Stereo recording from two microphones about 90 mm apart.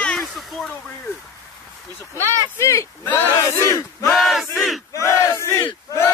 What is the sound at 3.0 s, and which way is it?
Speech, 20° left (ahead or behind).